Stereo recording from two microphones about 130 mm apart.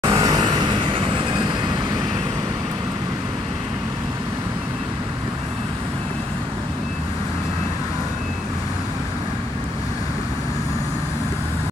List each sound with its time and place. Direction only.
0.0 s vehicle: 30° right (ahead or behind)